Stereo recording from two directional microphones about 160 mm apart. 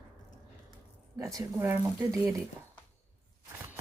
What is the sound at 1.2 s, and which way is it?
Speech, 20° right (ahead or behind).